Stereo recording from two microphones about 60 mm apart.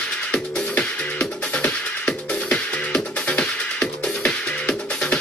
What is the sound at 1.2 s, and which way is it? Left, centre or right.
Music, centre.